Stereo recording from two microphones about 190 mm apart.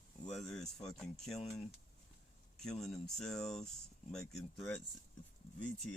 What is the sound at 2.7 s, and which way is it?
Speech, centre (ahead or behind).